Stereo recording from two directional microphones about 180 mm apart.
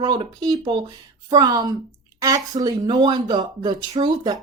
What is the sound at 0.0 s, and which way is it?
Speech, 25° right (ahead or behind).